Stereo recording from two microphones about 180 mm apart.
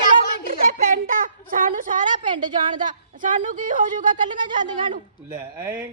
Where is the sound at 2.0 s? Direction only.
25° right (ahead or behind).